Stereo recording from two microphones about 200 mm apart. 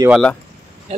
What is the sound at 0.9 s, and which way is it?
Speech, 30° right (ahead or behind).